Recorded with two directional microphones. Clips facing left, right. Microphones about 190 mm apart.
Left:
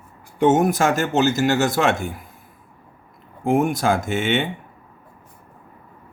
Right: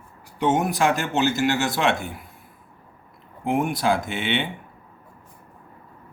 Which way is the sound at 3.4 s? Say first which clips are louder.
Left 3 dB; 45° left (ahead or behind).